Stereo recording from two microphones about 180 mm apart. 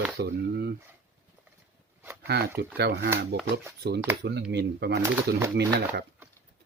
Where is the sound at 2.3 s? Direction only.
65° right (ahead or behind).